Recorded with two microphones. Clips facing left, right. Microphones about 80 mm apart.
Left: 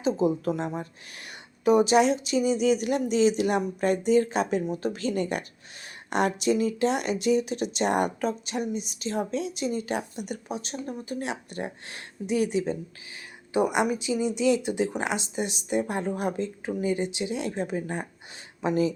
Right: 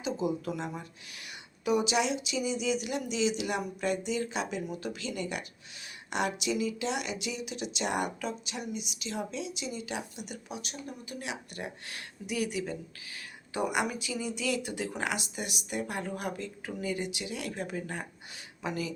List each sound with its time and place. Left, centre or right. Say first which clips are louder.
0.0 s speech: left 7 dB; left